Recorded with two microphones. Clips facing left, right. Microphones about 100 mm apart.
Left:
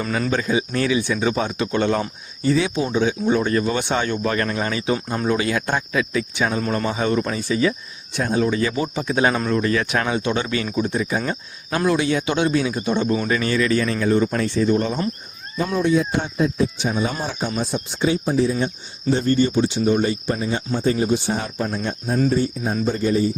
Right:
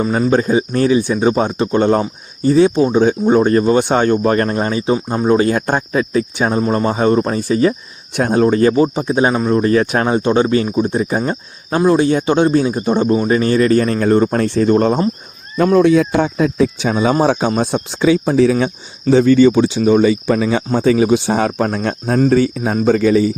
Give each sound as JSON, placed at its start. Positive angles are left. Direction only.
{"t": 0.3, "sound": "speech", "side_deg": -40}
{"t": 5.4, "sound": "speech", "side_deg": -40}
{"t": 8.1, "sound": "speech", "side_deg": -55}
{"t": 17.6, "sound": "speech", "side_deg": -75}